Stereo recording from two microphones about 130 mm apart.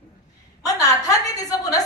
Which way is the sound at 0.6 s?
25° left (ahead or behind).